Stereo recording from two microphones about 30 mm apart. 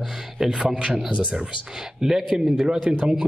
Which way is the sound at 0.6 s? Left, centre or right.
Right.